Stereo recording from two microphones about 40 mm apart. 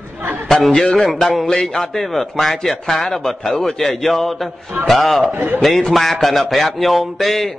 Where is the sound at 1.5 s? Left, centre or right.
Centre.